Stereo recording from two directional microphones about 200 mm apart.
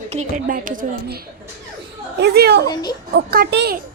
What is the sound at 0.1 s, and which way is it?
A woman's voice, 40° right (ahead or behind).